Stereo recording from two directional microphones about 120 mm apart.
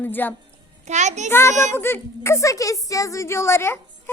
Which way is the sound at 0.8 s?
75° right (ahead or behind).